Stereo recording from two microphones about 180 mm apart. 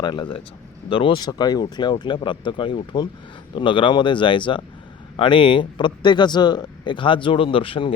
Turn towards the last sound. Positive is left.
turn(degrees=30)  # may be behind; listen again after turning